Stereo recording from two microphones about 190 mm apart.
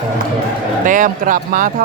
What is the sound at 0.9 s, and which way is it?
Speech, 45° right (ahead or behind).